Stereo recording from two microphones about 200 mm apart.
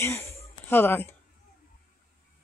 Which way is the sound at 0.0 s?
10° left (ahead or behind).